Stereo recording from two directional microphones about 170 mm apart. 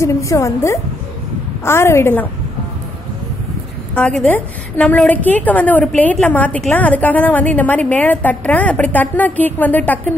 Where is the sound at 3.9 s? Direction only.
5° left (ahead or behind).